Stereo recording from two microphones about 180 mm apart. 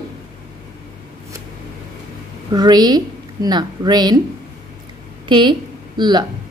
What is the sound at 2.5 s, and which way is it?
A woman's voice, 20° right (ahead or behind).